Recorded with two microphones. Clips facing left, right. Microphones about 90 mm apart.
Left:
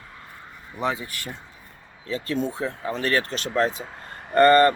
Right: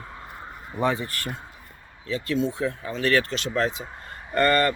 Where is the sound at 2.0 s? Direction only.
35° left (ahead or behind).